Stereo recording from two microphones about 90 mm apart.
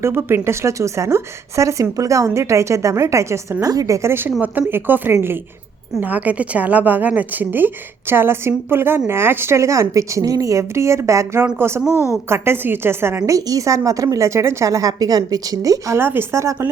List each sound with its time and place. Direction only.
0.0 s a woman's voice: 25° right (ahead or behind)
11.9 s a woman's voice: 30° left (ahead or behind)
12.1 s a woman's voice: 25° right (ahead or behind)
13.3 s speech: 40° right (ahead or behind)
16.0 s a woman's voice: 25° right (ahead or behind)